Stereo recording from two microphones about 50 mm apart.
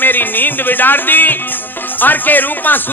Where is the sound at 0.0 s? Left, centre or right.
Left.